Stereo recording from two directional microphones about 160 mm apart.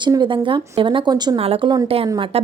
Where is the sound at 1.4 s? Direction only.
40° right (ahead or behind).